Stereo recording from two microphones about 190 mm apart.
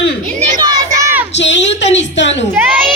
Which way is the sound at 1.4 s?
70° left (ahead or behind).